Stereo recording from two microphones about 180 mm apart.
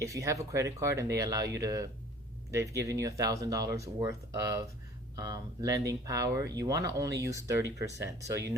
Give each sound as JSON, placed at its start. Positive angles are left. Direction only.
{"t": 0.0, "sound": "speech", "side_deg": -15}